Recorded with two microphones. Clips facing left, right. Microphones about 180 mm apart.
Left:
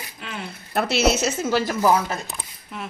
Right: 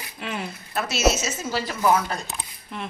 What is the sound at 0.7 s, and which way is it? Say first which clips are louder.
A woman's voice: left 2 dB; 60° left (ahead or behind).